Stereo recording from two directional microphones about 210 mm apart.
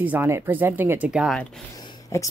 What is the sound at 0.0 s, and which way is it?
Speech, 10° right (ahead or behind).